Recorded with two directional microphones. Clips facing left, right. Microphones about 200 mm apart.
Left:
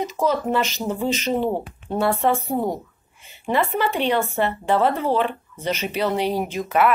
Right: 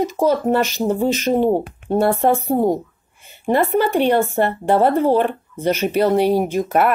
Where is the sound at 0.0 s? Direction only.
50° right (ahead or behind).